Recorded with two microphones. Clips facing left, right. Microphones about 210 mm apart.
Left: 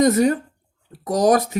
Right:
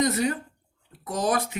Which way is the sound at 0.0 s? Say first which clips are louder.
Left 8 dB; 45° left (ahead or behind).